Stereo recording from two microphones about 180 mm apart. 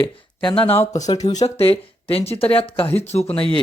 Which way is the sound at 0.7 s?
15° left (ahead or behind).